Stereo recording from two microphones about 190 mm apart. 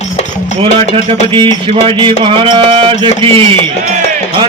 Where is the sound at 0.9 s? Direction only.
25° right (ahead or behind).